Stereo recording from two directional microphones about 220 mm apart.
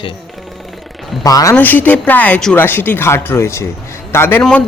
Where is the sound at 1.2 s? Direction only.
15° left (ahead or behind).